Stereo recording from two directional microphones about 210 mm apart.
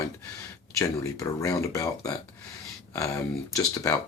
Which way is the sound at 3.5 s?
15° left (ahead or behind).